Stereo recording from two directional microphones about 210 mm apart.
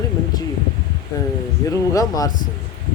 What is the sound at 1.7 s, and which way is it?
Speech, 15° left (ahead or behind).